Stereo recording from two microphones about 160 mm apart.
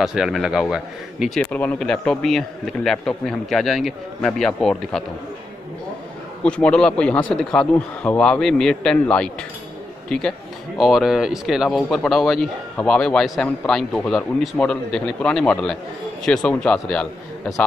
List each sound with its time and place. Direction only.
0.0 s speech: 5° right (ahead or behind)
1.4 s speech: 10° left (ahead or behind)
6.4 s speech: 5° left (ahead or behind)